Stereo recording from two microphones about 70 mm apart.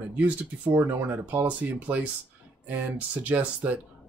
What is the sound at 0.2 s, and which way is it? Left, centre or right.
Speech, right.